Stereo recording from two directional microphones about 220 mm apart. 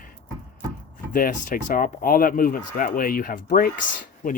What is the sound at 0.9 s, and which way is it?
Speech, 35° left (ahead or behind).